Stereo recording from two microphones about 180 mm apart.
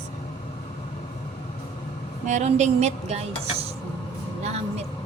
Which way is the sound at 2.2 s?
40° right (ahead or behind).